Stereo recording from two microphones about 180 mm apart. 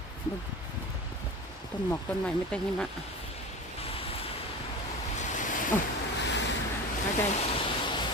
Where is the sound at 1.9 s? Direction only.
5° left (ahead or behind).